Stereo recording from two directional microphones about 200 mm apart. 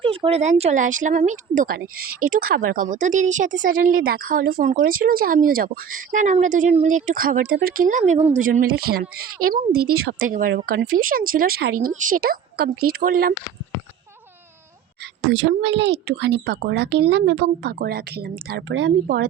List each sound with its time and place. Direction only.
0.0 s a sound: 25° right (ahead or behind)
0.6 s a woman's voice: 40° right (ahead or behind)
15.2 s a woman's voice: 70° right (ahead or behind); by 18.6 s 50° right (ahead or behind)
18.7 s speech: 75° right (ahead or behind)
19.0 s speech: 55° right (ahead or behind)